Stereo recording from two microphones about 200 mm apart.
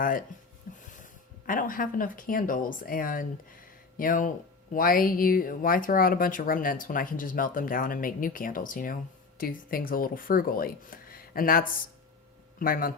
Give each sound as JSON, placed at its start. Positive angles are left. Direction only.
{"t": 0.9, "sound": "speech", "side_deg": 40}